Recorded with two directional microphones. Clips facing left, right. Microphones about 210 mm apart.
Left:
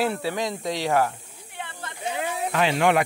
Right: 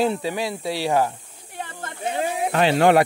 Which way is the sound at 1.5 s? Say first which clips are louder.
Right 4 dB; 40° right (ahead or behind).